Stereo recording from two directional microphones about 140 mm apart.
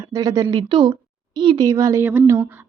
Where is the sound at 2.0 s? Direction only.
15° right (ahead or behind).